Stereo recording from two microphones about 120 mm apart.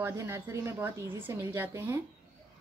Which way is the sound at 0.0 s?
20° right (ahead or behind).